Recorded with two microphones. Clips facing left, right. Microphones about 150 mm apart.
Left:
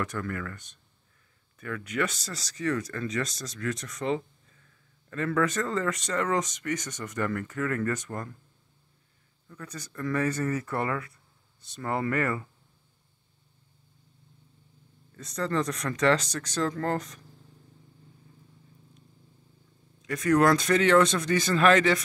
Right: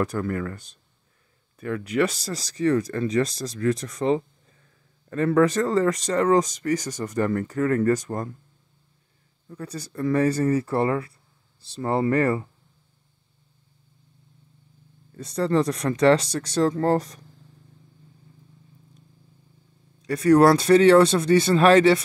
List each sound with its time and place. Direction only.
0.0 s speech: 30° right (ahead or behind)
9.5 s speech: 30° right (ahead or behind)
15.1 s speech: 30° right (ahead or behind)
20.0 s speech: 35° right (ahead or behind)